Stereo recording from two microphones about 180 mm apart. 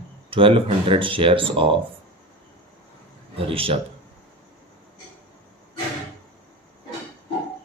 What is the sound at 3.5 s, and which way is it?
Speech, 30° right (ahead or behind).